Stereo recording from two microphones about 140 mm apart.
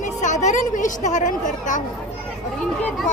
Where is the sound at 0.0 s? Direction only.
60° left (ahead or behind).